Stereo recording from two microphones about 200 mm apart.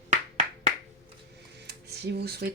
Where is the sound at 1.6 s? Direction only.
55° right (ahead or behind).